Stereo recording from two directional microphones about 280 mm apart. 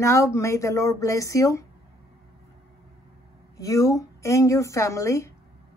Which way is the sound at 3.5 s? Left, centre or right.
Centre.